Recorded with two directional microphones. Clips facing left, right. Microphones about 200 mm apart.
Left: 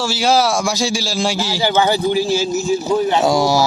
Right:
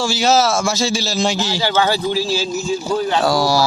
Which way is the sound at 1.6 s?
20° left (ahead or behind).